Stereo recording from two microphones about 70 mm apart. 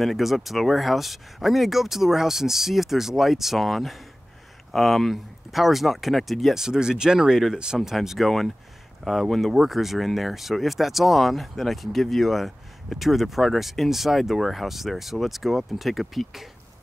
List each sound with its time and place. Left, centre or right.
0.0 s speech: centre